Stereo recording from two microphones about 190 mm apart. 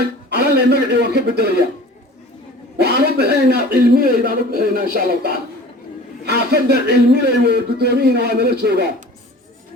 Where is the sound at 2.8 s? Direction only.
60° right (ahead or behind).